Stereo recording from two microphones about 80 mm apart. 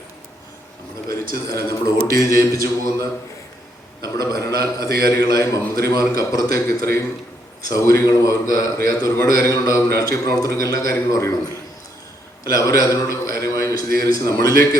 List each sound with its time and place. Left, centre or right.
1.0 s a man's voice: left
4.2 s a man's voice: left
12.5 s a man's voice: left